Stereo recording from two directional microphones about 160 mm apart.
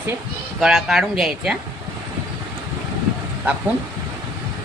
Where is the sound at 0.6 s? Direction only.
Centre (ahead or behind).